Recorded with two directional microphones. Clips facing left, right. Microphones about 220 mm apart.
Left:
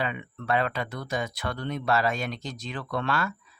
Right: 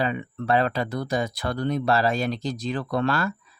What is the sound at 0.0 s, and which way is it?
Speech, 35° right (ahead or behind).